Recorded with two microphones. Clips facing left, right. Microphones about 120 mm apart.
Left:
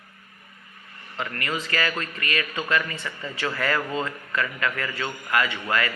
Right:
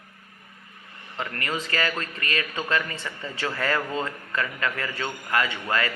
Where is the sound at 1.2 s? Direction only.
30° right (ahead or behind).